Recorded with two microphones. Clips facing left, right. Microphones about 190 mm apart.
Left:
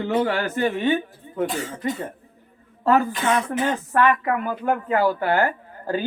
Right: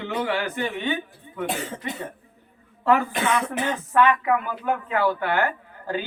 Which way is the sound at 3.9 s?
40° left (ahead or behind).